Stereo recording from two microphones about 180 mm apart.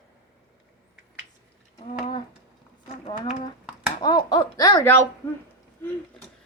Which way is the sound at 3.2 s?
45° left (ahead or behind).